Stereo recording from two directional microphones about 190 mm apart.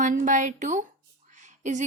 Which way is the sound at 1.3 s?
40° right (ahead or behind).